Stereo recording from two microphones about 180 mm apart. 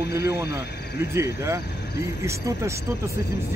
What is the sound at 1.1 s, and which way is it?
Speech, 15° right (ahead or behind).